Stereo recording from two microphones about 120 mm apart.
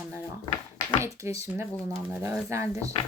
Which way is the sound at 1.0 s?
25° right (ahead or behind).